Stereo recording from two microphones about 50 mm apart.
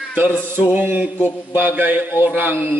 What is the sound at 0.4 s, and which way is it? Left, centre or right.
Mantra, right.